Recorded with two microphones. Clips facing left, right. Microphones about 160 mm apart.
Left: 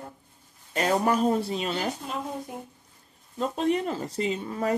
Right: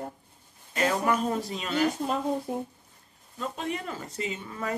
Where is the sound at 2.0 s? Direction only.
40° right (ahead or behind).